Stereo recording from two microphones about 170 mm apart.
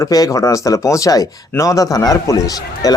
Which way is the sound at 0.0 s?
20° left (ahead or behind).